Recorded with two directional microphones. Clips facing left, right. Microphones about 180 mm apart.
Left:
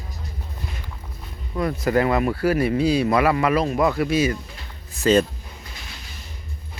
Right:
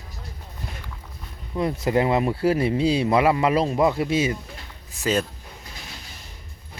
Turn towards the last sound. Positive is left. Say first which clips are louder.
# left 6 dB
turn(degrees=-10)  # may be behind; listen again after turning